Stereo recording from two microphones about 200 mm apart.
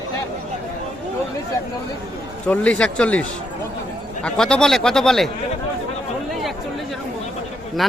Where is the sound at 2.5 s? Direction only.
5° left (ahead or behind).